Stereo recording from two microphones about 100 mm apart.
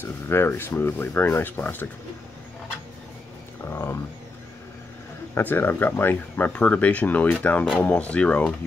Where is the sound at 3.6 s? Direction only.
25° left (ahead or behind).